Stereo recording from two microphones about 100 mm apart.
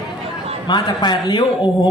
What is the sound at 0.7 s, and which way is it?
Speech, 50° left (ahead or behind).